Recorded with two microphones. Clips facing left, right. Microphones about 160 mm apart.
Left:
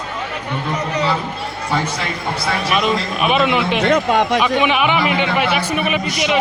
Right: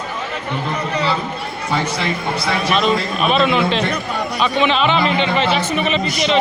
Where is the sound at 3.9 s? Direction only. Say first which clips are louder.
Left 8 dB; 90° left.